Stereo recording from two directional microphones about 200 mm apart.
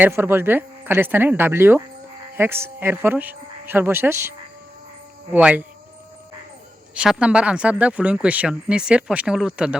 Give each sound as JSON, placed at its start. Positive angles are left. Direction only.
{"t": 0.0, "sound": "speech", "side_deg": -10}
{"t": 6.9, "sound": "speech", "side_deg": -5}